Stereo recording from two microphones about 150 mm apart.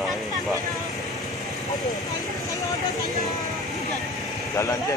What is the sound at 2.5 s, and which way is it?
Speech, 20° left (ahead or behind).